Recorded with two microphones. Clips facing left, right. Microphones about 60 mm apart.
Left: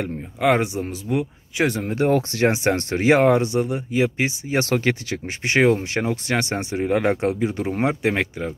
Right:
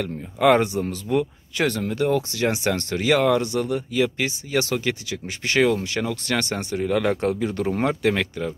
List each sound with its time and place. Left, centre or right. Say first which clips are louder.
0.4 s speech: right 2 dB; centre
2.0 s speech: left 4 dB; left
4.6 s speech: left 4 dB; left
5.4 s speech: left 2 dB; left